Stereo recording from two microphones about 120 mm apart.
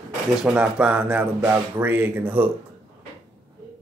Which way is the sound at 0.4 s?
5° right (ahead or behind).